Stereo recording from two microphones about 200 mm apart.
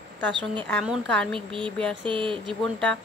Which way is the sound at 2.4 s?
5° left (ahead or behind).